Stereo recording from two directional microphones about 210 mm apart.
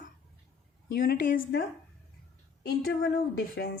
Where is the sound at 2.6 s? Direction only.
55° left (ahead or behind).